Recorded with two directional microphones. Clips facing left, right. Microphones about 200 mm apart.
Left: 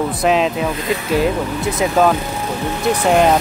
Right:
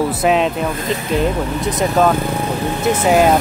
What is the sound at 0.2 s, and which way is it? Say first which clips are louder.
Speech: left 2 dB; centre (ahead or behind).